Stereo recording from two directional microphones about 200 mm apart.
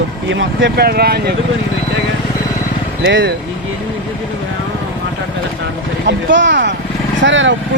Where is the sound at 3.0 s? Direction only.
65° right (ahead or behind).